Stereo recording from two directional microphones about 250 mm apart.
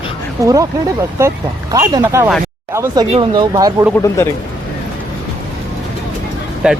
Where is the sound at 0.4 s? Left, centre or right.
Centre.